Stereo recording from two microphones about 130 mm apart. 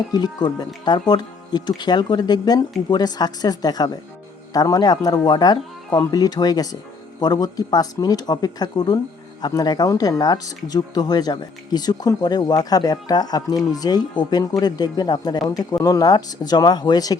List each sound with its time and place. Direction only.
0.1 s speech: 30° left (ahead or behind)